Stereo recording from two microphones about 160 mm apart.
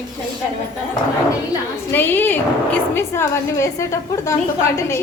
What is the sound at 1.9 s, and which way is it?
A woman's voice, 15° left (ahead or behind).